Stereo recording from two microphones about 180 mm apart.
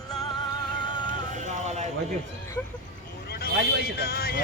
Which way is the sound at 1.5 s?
40° right (ahead or behind).